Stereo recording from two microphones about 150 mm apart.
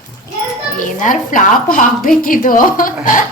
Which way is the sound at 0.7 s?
60° left (ahead or behind).